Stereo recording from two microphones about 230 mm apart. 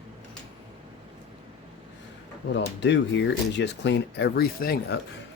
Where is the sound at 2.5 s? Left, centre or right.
Left.